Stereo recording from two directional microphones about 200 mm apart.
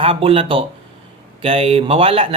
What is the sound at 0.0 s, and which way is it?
Speech, 25° right (ahead or behind).